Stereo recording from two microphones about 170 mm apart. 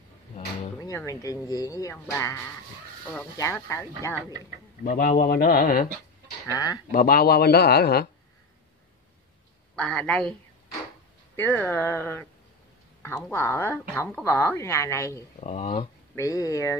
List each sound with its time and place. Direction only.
0.7 s speech: 20° left (ahead or behind)
4.8 s speech: 60° left (ahead or behind)
6.4 s speech: 20° left (ahead or behind)
6.9 s speech: 60° left (ahead or behind)
9.8 s speech: 5° left (ahead or behind)
11.3 s speech: 10° left (ahead or behind)
15.4 s speech: 40° left (ahead or behind)
16.2 s speech: 20° left (ahead or behind)